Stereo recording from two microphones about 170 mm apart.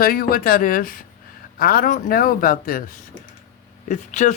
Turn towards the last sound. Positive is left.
turn(degrees=45)  # may be behind; listen again after turning